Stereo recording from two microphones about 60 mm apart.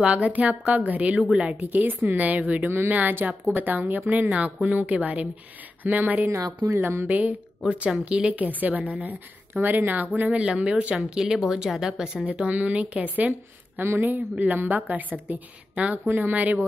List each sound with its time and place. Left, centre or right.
0.0 s a woman's voice: right
2.6 s a woman's voice: right
2.9 s a woman's voice: right; by 12.2 s centre
12.3 s a woman's voice: right
13.7 s a woman's voice: right